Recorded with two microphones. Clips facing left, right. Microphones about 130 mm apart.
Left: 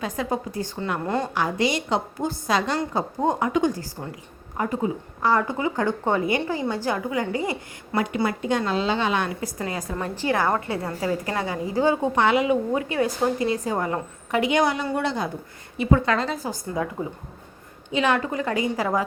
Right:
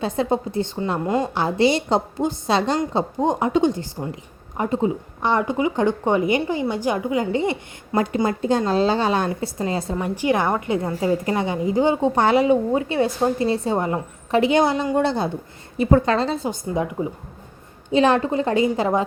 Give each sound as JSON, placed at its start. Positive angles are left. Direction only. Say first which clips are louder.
{"t": 0.0, "sound": "a woman's voice", "louder": "right 5 dB", "side_deg": -30}
{"t": 1.0, "sound": "a woman's voice", "louder": "right 4 dB", "side_deg": -10}
{"t": 1.3, "sound": "a woman's voice", "louder": "right 5 dB", "side_deg": -30}
{"t": 2.7, "sound": "a woman's voice", "louder": "right 4 dB", "side_deg": -20}
{"t": 10.0, "sound": "a woman's voice", "louder": "right 2 dB", "side_deg": -15}
{"t": 12.1, "sound": "a woman's voice", "louder": "right 3 dB", "side_deg": -35}
{"t": 17.9, "sound": "a woman's voice", "louder": "right 5 dB", "side_deg": -35}